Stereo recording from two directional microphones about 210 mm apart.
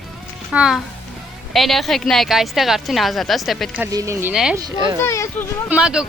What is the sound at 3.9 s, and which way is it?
Speech, 15° right (ahead or behind).